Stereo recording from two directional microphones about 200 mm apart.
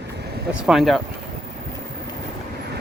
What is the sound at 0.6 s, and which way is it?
Speech, centre (ahead or behind).